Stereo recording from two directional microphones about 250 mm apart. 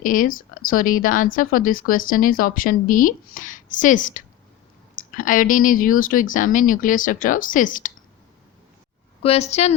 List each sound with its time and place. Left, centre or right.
0.0 s speech: left
9.2 s a woman's voice: left